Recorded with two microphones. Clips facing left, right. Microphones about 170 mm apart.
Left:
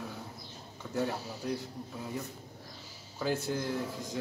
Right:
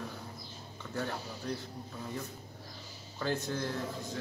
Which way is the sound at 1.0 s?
10° left (ahead or behind).